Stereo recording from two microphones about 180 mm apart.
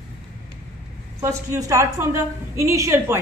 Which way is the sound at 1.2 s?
15° right (ahead or behind).